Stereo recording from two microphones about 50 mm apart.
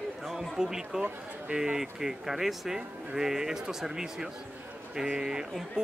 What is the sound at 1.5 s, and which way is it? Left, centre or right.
Speech, centre.